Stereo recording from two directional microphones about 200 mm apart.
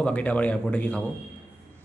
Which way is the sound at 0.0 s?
5° left (ahead or behind).